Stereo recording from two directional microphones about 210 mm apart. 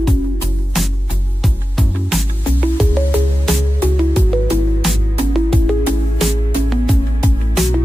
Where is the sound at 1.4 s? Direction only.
Centre (ahead or behind).